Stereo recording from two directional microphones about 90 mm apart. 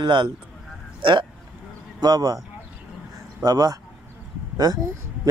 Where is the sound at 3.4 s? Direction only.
45° right (ahead or behind).